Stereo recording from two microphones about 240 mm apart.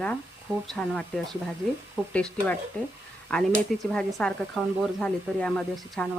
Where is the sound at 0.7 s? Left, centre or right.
Centre.